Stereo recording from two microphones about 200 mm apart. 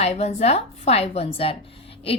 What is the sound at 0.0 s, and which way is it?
A woman's voice, 30° left (ahead or behind).